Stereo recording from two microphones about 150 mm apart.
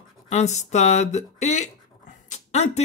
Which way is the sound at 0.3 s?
50° left (ahead or behind).